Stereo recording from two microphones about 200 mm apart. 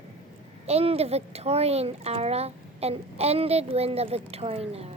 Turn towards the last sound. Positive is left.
turn(degrees=-30)  # may be behind; listen again after turning